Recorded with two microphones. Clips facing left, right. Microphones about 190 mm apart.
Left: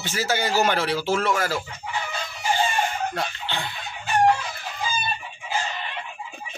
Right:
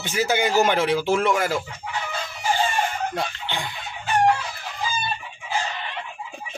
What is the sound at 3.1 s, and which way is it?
Chicken, 15° right (ahead or behind).